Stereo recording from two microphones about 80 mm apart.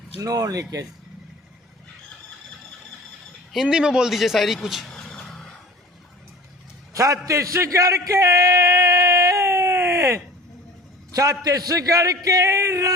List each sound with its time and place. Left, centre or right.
0.2 s a man's voice: right
3.5 s speech: centre
4.9 s vehicle: centre
6.9 s a sound: right
11.1 s a man's voice: right